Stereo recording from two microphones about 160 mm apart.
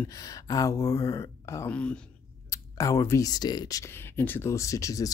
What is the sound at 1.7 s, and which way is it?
Speech, 5° left (ahead or behind).